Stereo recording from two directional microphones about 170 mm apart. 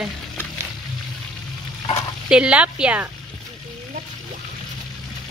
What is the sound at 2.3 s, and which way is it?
Speech, 5° right (ahead or behind).